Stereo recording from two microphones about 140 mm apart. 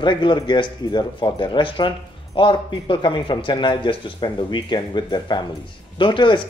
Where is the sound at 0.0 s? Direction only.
35° left (ahead or behind).